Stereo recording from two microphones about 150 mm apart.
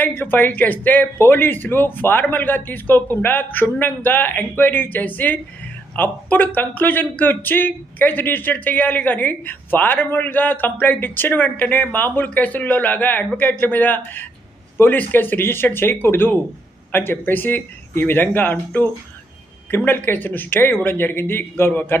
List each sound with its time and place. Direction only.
0.0 s a man's voice: 15° left (ahead or behind)